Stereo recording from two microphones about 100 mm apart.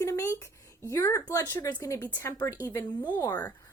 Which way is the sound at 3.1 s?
20° left (ahead or behind).